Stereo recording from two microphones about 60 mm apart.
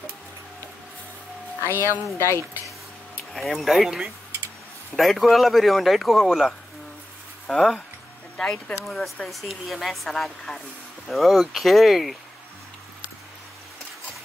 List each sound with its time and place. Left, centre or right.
1.6 s speech: left
2.1 s speech: left
3.3 s speech: centre
8.4 s speech: centre
8.8 s speech: centre